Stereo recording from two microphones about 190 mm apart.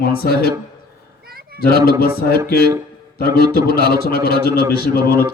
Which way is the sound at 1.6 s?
55° left (ahead or behind).